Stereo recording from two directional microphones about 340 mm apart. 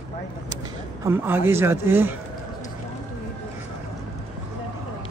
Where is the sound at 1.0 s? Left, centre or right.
Centre.